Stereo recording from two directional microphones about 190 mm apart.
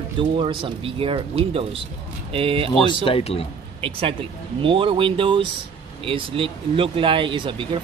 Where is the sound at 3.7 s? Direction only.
30° right (ahead or behind).